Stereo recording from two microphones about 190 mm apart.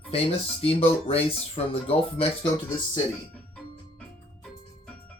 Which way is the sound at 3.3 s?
5° left (ahead or behind).